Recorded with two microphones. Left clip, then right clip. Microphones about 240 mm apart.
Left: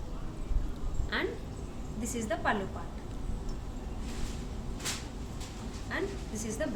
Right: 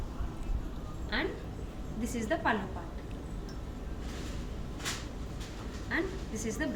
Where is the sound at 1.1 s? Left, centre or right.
Left.